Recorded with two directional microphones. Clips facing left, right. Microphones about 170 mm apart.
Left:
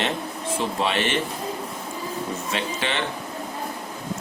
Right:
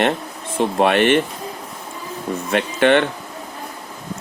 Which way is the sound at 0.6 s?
60° right (ahead or behind).